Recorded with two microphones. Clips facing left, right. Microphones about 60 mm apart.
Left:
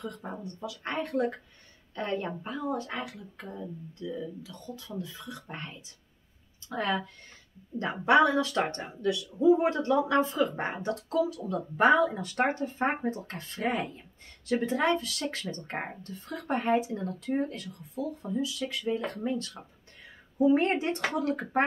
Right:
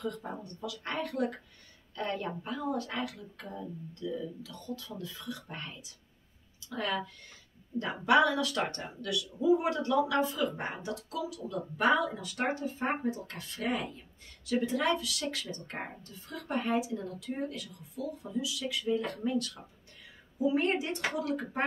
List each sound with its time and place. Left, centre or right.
0.0 s speech: centre; by 7.0 s left
8.0 s speech: left
20.3 s a woman's voice: left